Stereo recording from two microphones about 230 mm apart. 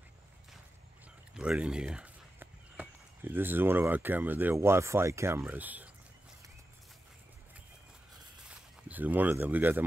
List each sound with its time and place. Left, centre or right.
1.3 s speech: centre
8.5 s speech: centre